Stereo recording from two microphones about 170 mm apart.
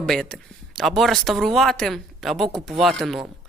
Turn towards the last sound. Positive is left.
turn(degrees=0)  # may be behind; listen again after turning